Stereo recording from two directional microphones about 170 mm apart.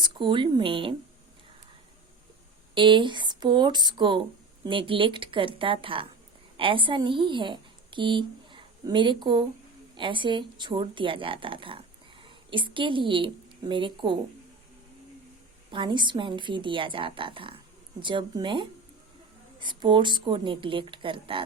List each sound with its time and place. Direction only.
0.0 s a woman's voice: 30° right (ahead or behind)
2.7 s a woman's voice: 30° right (ahead or behind)
15.7 s a woman's voice: 30° right (ahead or behind)